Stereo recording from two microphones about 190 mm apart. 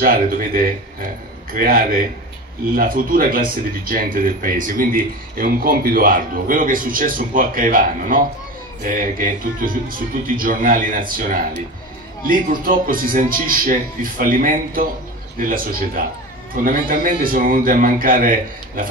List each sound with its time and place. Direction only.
0.0 s speech: 50° right (ahead or behind)